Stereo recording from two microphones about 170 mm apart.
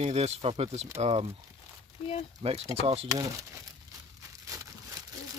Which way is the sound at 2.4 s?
35° right (ahead or behind).